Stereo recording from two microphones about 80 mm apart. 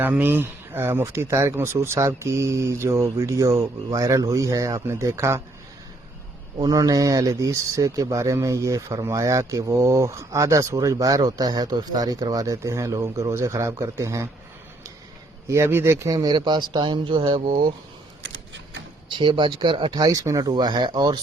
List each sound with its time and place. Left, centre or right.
0.0 s speech: right
6.7 s speech: right
15.4 s speech: right
16.0 s speech: right
16.3 s speech: right
19.0 s speech: right
20.0 s speech: right